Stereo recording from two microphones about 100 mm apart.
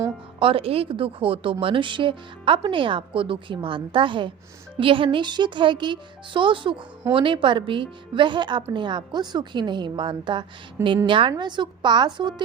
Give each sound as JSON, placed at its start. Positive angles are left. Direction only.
{"t": 0.3, "sound": "a woman's voice", "side_deg": -65}